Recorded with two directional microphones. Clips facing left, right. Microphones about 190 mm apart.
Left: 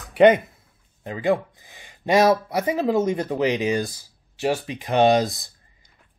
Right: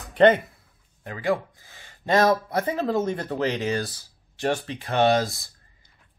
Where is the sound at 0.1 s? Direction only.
10° left (ahead or behind).